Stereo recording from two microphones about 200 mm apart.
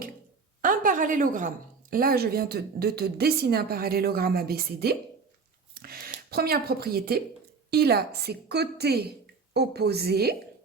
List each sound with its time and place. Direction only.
0.6 s a woman's voice: 40° right (ahead or behind)